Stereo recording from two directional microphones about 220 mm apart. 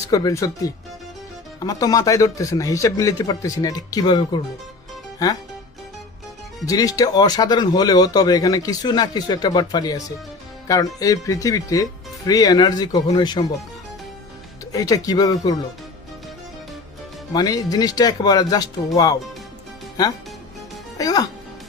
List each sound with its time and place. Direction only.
0.1 s speech: 15° left (ahead or behind)
6.7 s speech: 15° left (ahead or behind)
11.0 s speech: 15° left (ahead or behind)
14.7 s speech: 15° left (ahead or behind)
17.3 s speech: 15° left (ahead or behind)
21.0 s speech: 15° left (ahead or behind)